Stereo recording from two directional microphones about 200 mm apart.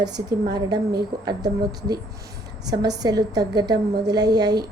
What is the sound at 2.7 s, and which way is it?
A woman's voice, 20° right (ahead or behind).